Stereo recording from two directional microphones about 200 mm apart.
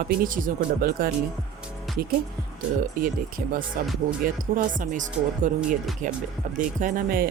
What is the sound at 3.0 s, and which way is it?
Speech, 45° right (ahead or behind).